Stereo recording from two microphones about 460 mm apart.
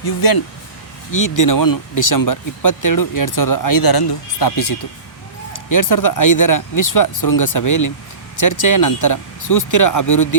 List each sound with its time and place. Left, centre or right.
0.0 s speech: left